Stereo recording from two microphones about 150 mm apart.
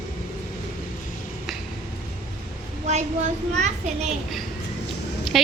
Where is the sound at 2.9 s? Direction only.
50° right (ahead or behind).